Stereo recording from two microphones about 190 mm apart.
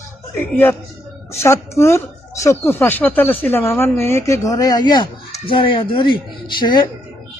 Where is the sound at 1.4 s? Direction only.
15° left (ahead or behind).